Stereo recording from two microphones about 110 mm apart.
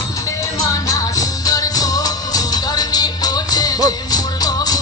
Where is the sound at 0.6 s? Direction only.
35° left (ahead or behind).